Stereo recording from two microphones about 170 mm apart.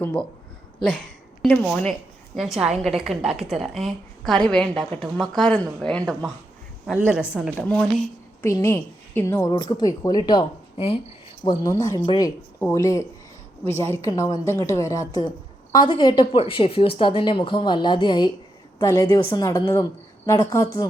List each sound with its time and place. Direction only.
0.0 s speech: 5° left (ahead or behind)
1.7 s a woman's voice: centre (ahead or behind)
7.0 s a woman's voice: 5° right (ahead or behind)
7.7 s speech: 5° left (ahead or behind)
8.4 s a woman's voice: 15° left (ahead or behind); by 11.0 s 35° left (ahead or behind)
11.4 s a woman's voice: 20° left (ahead or behind)
19.2 s a woman's voice: 30° left (ahead or behind)
19.7 s speech: 15° left (ahead or behind)